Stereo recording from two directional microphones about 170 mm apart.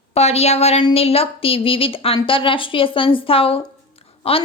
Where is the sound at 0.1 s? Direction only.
40° left (ahead or behind).